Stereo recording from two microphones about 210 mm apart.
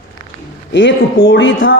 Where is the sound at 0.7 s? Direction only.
60° left (ahead or behind).